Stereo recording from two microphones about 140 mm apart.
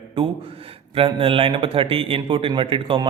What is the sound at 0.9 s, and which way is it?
A man's voice, 40° right (ahead or behind).